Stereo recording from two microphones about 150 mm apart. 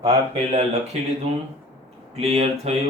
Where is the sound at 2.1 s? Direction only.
45° right (ahead or behind).